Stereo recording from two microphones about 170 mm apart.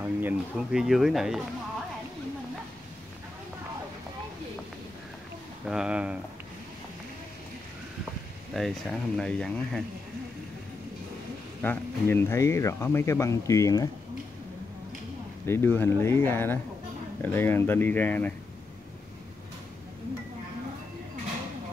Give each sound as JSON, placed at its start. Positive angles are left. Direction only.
{"t": 0.0, "sound": "speech", "side_deg": -10}
{"t": 5.7, "sound": "speech", "side_deg": -5}
{"t": 8.5, "sound": "speech", "side_deg": 0}
{"t": 11.6, "sound": "speech", "side_deg": 10}
{"t": 15.4, "sound": "speech", "side_deg": 15}